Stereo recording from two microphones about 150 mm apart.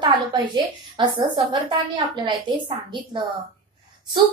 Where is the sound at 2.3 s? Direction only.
35° right (ahead or behind).